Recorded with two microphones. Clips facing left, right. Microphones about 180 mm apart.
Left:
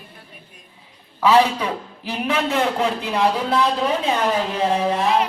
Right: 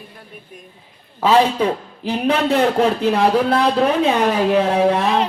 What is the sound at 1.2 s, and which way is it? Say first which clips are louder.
Speech: right 2 dB; 30° right (ahead or behind).